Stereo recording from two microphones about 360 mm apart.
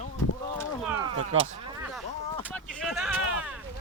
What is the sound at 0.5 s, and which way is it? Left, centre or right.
Speech, centre.